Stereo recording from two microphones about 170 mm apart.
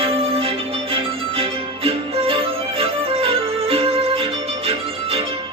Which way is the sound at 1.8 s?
35° right (ahead or behind).